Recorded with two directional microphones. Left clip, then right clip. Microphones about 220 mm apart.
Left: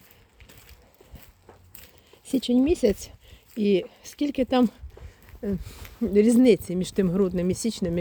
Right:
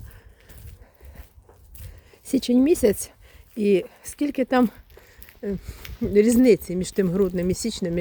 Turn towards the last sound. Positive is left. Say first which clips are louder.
# right 1 dB
turn(degrees=-5)  # may be behind; listen again after turning